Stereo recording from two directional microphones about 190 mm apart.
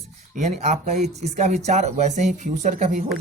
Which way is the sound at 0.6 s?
35° right (ahead or behind).